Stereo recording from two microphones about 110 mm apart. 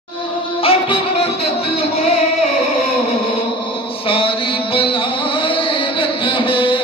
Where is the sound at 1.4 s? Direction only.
65° left (ahead or behind).